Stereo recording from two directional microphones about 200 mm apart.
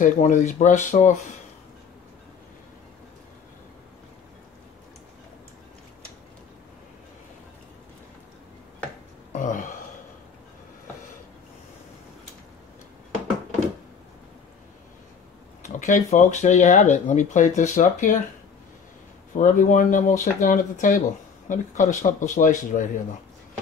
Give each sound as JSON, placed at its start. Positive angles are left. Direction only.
{"t": 0.0, "sound": "speech", "side_deg": 40}
{"t": 9.3, "sound": "burping", "side_deg": 40}
{"t": 15.6, "sound": "speech", "side_deg": 35}
{"t": 19.3, "sound": "speech", "side_deg": 40}